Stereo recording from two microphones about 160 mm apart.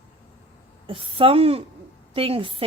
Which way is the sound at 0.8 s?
35° right (ahead or behind).